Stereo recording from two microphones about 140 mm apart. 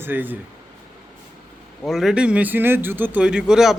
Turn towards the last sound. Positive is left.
turn(degrees=-5)  # may be behind; listen again after turning